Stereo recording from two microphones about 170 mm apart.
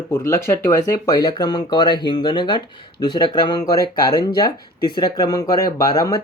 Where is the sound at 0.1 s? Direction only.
15° left (ahead or behind).